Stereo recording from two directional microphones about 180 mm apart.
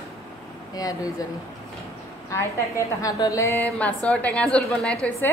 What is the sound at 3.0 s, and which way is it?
A woman's voice, 20° left (ahead or behind).